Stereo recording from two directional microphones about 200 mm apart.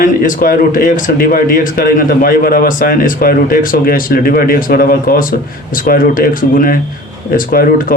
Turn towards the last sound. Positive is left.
turn(degrees=45)  # may be behind; listen again after turning